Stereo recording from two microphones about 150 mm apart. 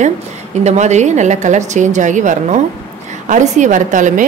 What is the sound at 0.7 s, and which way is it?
A woman's voice, 50° right (ahead or behind).